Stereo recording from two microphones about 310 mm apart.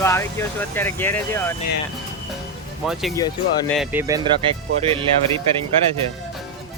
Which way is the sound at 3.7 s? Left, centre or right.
Centre.